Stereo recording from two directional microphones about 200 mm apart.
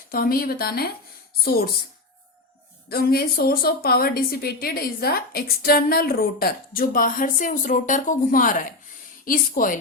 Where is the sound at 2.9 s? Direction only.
50° left (ahead or behind).